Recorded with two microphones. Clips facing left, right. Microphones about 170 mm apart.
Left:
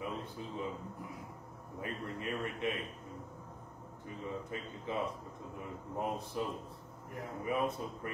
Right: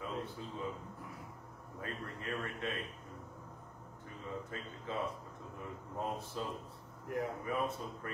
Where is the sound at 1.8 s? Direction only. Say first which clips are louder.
Left 3 dB; 15° left (ahead or behind).